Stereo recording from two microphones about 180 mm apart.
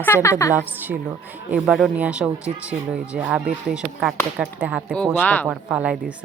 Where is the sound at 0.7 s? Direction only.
10° right (ahead or behind).